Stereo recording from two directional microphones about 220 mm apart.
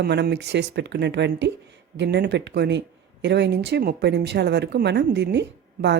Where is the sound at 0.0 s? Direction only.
50° right (ahead or behind).